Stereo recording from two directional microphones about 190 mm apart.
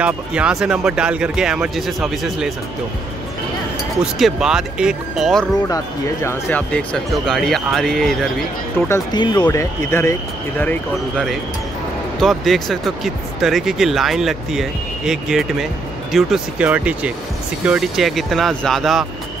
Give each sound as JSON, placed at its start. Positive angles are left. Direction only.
{"t": 0.0, "sound": "speech", "side_deg": -5}
{"t": 4.0, "sound": "speech", "side_deg": -5}
{"t": 8.7, "sound": "speech", "side_deg": 15}
{"t": 9.2, "sound": "speech", "side_deg": 25}